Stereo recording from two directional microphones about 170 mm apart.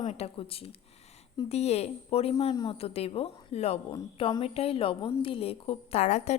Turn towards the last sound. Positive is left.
turn(degrees=40)  # may be behind; listen again after turning